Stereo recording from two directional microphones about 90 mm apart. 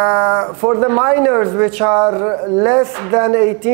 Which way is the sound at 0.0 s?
25° right (ahead or behind).